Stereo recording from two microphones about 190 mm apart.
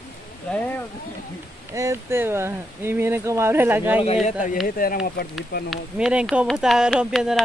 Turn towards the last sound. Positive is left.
turn(degrees=0)  # may be behind; listen again after turning